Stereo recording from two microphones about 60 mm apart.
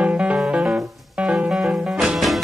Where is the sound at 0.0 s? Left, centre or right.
Right.